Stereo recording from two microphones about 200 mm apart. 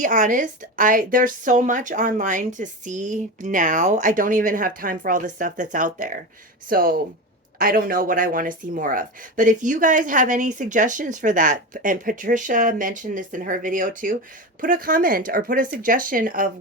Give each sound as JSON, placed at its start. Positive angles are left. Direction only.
{"t": 0.0, "sound": "speech", "side_deg": -40}